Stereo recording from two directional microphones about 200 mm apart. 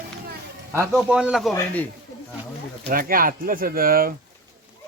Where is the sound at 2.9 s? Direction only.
45° right (ahead or behind).